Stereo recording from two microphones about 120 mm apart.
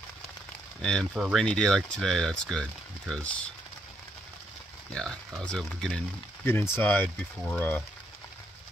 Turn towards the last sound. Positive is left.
turn(degrees=15)  # may be behind; listen again after turning